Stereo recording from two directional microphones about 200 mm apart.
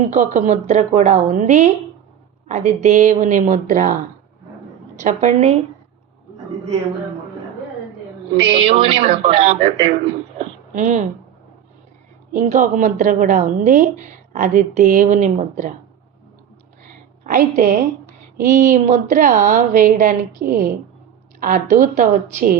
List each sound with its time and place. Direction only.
0.1 s a woman's voice: 35° right (ahead or behind)
4.9 s a woman's voice: 40° right (ahead or behind)
8.4 s speech: 30° right (ahead or behind)
10.3 s a sound: 35° right (ahead or behind)
12.3 s a woman's voice: 40° right (ahead or behind)
17.3 s a woman's voice: 45° right (ahead or behind)